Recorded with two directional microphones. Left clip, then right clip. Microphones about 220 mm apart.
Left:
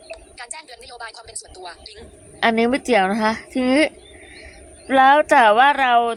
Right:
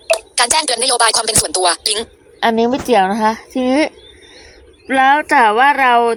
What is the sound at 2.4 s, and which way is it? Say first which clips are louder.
Speech: right 4 dB; 10° right (ahead or behind).